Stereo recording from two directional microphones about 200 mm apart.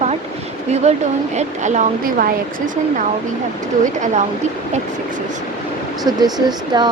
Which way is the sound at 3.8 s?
35° right (ahead or behind).